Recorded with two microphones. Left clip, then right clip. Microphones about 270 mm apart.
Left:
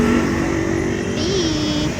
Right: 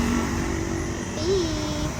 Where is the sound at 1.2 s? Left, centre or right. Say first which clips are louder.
Left 2 dB; centre.